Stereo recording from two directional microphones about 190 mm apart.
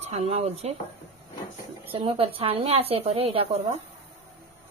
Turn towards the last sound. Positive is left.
turn(degrees=-30)  # may be behind; listen again after turning